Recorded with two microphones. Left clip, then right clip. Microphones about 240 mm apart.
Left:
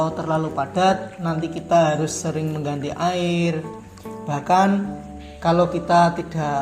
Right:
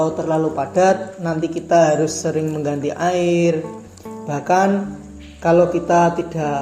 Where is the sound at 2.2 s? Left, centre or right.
Left.